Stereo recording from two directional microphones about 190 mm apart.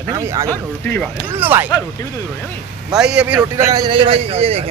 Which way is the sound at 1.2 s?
10° right (ahead or behind).